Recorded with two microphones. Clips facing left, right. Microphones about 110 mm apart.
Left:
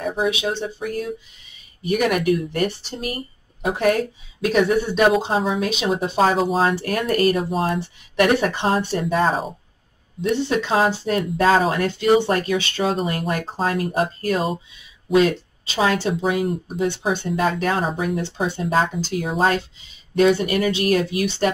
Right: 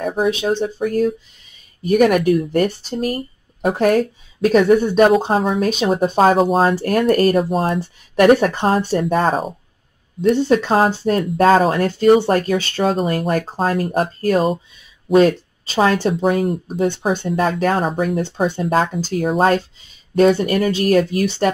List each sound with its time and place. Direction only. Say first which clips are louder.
0.3 s speech: right 5 dB; 45° right (ahead or behind)